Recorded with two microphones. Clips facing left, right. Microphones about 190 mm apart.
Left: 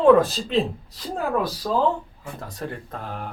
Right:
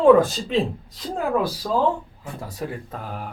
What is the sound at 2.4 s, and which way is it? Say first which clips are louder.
Speech: right 2 dB; 10° right (ahead or behind).